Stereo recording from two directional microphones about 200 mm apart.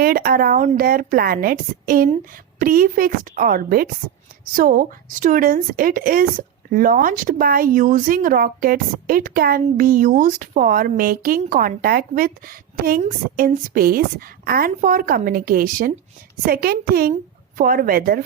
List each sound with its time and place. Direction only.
0.0 s speech: 50° right (ahead or behind)